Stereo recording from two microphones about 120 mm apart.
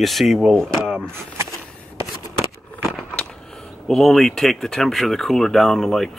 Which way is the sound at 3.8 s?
Centre (ahead or behind).